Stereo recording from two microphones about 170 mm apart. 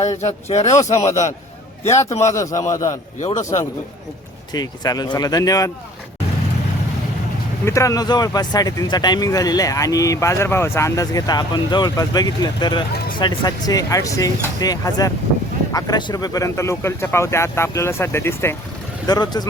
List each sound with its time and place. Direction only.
0.2 s speech: 40° left (ahead or behind)
1.9 s speech: 15° left (ahead or behind)
3.2 s speech: 45° left (ahead or behind)
4.5 s speech: 25° left (ahead or behind)
7.6 s speech: 20° left (ahead or behind)